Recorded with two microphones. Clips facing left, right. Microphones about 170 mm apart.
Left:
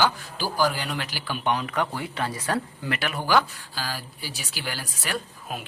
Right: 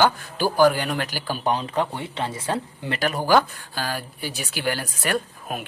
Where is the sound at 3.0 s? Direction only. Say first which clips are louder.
Right 4 dB; 40° right (ahead or behind); by 5.6 s 55° right (ahead or behind).